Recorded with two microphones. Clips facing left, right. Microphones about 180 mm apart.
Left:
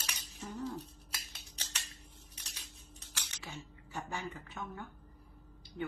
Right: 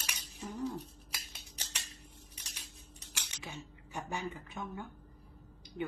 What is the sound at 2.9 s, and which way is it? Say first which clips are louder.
A woman's voice: even; 15° right (ahead or behind).